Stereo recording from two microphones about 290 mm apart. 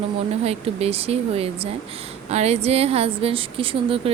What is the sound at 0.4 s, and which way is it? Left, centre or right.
A woman's voice, right.